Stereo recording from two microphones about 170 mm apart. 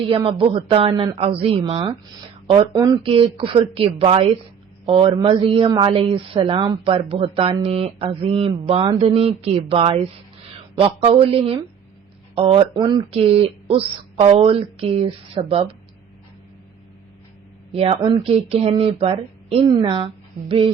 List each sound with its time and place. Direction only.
0.1 s speech: 35° right (ahead or behind)
17.7 s speech: 35° right (ahead or behind)